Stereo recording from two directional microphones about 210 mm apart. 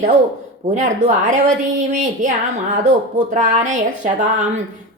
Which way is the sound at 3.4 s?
35° right (ahead or behind).